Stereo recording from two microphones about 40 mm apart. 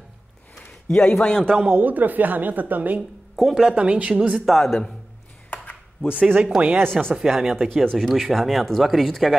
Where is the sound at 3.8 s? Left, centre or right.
Right.